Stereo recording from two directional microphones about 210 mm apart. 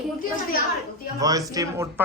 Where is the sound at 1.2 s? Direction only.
15° right (ahead or behind).